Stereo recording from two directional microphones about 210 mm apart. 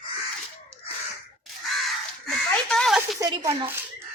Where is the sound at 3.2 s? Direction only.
15° right (ahead or behind).